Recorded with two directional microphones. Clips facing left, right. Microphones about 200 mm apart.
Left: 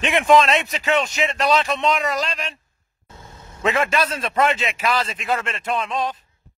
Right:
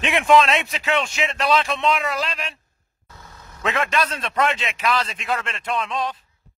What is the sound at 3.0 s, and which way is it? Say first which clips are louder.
Vehicle: left 2 dB; 25° left (ahead or behind).